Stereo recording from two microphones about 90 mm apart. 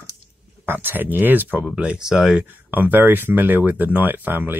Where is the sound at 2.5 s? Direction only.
20° right (ahead or behind).